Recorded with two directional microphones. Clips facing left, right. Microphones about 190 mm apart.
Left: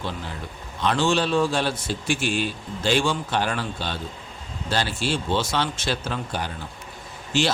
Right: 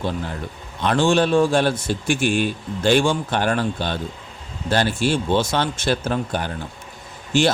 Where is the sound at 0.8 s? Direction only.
55° right (ahead or behind).